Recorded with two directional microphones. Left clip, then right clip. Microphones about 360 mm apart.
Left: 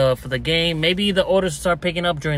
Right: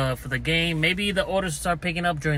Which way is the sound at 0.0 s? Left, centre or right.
Centre.